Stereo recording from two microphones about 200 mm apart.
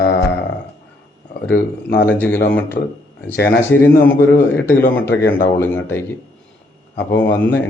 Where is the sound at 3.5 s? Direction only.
10° left (ahead or behind).